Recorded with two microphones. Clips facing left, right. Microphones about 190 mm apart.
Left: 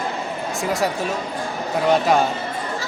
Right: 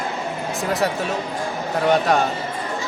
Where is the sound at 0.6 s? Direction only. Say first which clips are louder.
Even; centre (ahead or behind).